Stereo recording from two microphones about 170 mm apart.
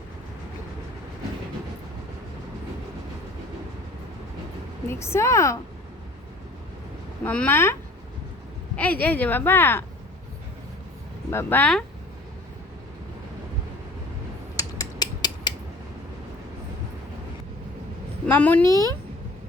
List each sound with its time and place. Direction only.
4.9 s speech: 15° left (ahead or behind)
7.3 s speech: 10° left (ahead or behind)
11.3 s speech: 15° left (ahead or behind)
14.5 s mechanisms: 20° left (ahead or behind)
18.3 s speech: 10° left (ahead or behind)